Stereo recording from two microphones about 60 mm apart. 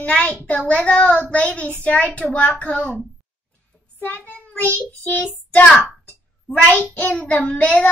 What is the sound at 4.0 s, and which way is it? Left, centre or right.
Child singing, left.